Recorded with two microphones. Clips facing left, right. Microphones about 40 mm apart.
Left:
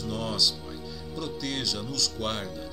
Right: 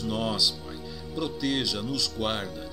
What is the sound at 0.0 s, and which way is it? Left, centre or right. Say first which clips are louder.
Speech: right 1 dB; centre.